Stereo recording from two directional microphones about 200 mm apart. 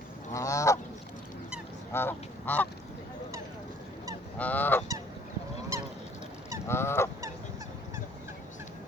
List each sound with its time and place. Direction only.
0.3 s goose: 15° left (ahead or behind)
1.9 s goose: 10° left (ahead or behind)
4.4 s goose: 10° left (ahead or behind)
6.7 s goose: 10° left (ahead or behind)